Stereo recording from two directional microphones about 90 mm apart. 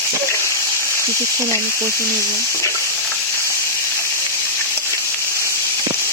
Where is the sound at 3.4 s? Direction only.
30° left (ahead or behind).